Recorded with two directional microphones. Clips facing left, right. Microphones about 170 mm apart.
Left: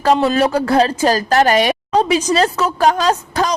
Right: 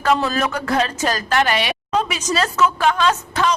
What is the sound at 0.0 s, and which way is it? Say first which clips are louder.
A woman's voice: left 5 dB; 30° left (ahead or behind).